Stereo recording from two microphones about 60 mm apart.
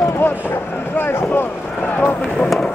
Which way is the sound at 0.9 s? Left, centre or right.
Left.